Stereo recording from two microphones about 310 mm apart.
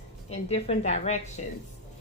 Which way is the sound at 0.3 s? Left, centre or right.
Centre.